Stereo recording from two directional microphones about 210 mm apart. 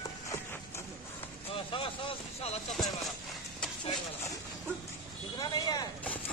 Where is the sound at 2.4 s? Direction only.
30° left (ahead or behind).